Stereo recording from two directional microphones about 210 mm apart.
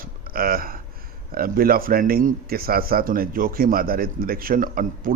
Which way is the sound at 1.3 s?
45° right (ahead or behind).